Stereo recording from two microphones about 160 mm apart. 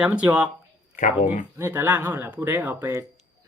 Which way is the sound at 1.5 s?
15° right (ahead or behind).